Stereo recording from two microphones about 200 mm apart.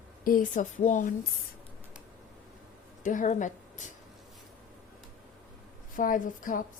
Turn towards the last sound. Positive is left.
turn(degrees=40)  # may be behind; listen again after turning